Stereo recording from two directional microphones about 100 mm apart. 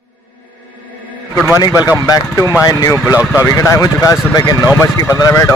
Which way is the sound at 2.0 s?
35° left (ahead or behind).